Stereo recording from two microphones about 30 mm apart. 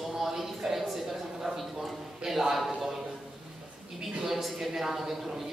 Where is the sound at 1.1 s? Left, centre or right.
Centre.